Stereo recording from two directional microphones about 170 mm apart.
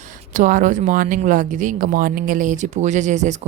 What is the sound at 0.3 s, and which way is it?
Speech, 50° right (ahead or behind).